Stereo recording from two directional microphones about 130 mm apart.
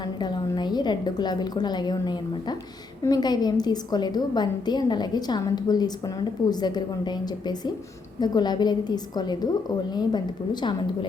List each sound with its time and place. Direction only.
0.2 s a woman's voice: 35° left (ahead or behind)